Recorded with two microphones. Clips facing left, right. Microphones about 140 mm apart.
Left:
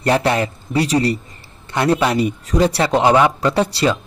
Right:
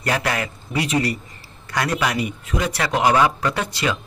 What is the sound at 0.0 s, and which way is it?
A man's voice, 30° left (ahead or behind).